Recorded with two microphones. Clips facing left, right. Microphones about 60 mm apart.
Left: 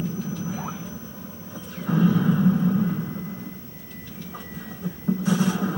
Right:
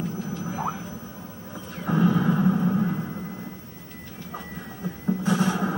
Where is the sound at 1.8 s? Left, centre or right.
Centre.